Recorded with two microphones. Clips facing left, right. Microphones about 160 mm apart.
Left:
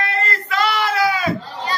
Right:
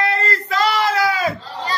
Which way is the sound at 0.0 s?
30° right (ahead or behind).